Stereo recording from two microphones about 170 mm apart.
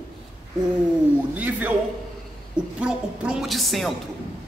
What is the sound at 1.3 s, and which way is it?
Speech, 10° right (ahead or behind).